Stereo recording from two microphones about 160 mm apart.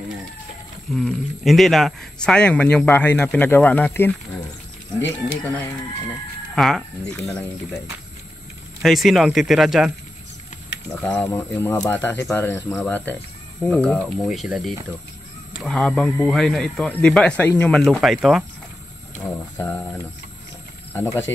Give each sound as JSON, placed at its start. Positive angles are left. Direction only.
{"t": 0.8, "sound": "speech", "side_deg": 0}
{"t": 6.5, "sound": "speech", "side_deg": 0}
{"t": 8.8, "sound": "speech", "side_deg": 0}
{"t": 11.0, "sound": "speech", "side_deg": 10}
{"t": 19.1, "sound": "speech", "side_deg": 15}